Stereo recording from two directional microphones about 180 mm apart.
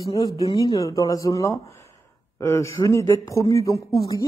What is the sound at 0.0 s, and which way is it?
Speech, 20° left (ahead or behind).